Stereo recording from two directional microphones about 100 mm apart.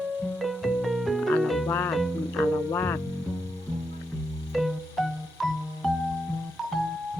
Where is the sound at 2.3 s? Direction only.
20° left (ahead or behind).